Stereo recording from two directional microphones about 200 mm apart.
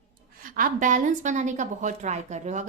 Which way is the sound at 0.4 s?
45° right (ahead or behind).